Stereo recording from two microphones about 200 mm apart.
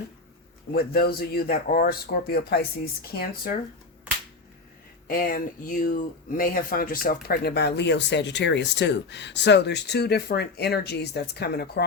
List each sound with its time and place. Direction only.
0.7 s speech: 50° left (ahead or behind)
5.0 s speech: 45° left (ahead or behind)